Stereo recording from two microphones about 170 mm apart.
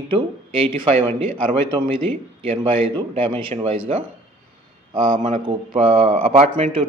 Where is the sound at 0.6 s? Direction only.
35° right (ahead or behind).